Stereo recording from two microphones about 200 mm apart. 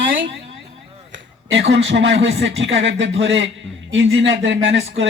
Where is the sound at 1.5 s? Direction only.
65° right (ahead or behind).